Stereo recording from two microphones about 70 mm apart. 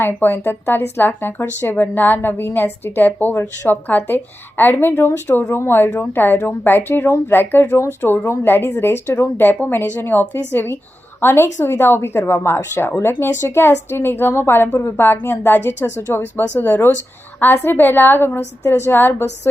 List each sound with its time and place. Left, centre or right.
0.0 s a woman's voice: left